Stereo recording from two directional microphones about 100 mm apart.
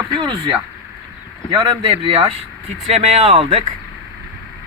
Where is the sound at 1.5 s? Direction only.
60° right (ahead or behind).